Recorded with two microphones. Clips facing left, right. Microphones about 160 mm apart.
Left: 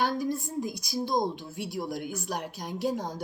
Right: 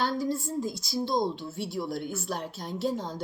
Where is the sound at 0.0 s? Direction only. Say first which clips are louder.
Even; 15° left (ahead or behind).